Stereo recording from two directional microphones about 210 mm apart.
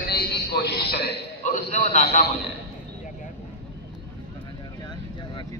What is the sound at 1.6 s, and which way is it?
Speech, 30° left (ahead or behind).